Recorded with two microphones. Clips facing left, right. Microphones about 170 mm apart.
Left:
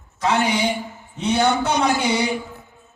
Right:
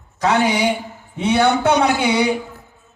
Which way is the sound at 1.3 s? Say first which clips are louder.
Right 4 dB; 60° right (ahead or behind).